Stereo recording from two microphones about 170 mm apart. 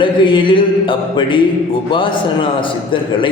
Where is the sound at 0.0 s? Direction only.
30° left (ahead or behind).